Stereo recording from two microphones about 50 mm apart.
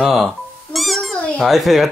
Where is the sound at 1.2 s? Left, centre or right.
Left.